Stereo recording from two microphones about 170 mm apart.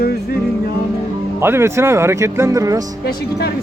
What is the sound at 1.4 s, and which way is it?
Speech, 15° right (ahead or behind).